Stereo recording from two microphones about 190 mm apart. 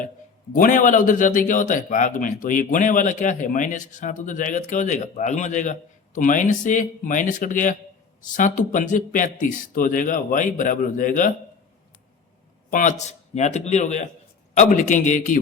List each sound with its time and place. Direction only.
0.5 s a man's voice: 45° left (ahead or behind)
12.7 s a man's voice: 40° left (ahead or behind)